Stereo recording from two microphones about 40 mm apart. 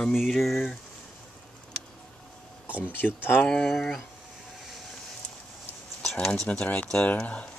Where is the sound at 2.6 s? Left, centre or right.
Right.